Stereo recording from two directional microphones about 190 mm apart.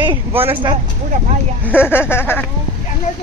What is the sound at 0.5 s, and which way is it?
Speech, 25° right (ahead or behind).